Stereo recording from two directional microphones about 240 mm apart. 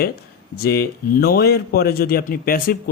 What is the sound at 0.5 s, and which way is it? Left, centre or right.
A man's voice, left.